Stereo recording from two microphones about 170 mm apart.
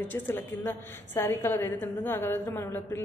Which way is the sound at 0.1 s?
10° left (ahead or behind).